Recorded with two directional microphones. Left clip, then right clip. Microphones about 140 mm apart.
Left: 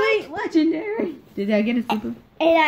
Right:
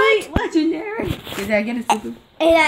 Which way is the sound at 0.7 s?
30° left (ahead or behind).